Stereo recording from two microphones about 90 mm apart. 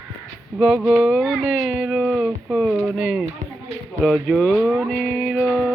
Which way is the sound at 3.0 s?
10° right (ahead or behind).